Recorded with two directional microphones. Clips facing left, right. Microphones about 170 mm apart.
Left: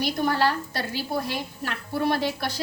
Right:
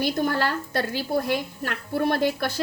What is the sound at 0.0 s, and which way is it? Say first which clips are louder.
A woman's voice: even; 50° right (ahead or behind).